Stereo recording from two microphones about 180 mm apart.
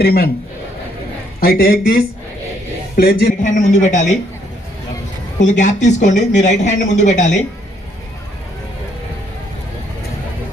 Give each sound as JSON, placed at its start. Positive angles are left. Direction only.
{"t": 0.0, "sound": "speech", "side_deg": 55}
{"t": 1.4, "sound": "speech", "side_deg": 60}
{"t": 5.4, "sound": "speech", "side_deg": 40}